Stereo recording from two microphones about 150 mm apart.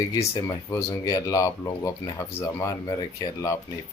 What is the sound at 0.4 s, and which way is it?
Speech, 20° left (ahead or behind).